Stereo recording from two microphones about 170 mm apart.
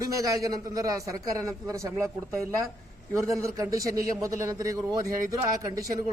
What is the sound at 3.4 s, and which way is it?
A man's voice, 20° right (ahead or behind).